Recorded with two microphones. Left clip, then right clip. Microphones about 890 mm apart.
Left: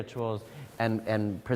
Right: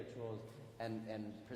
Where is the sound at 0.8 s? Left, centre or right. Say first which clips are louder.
Left 16 dB; left.